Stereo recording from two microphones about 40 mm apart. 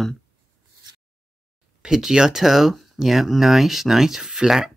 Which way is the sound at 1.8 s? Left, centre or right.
Centre.